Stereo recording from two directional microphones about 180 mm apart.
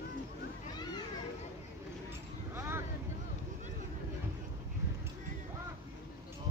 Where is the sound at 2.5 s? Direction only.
15° right (ahead or behind).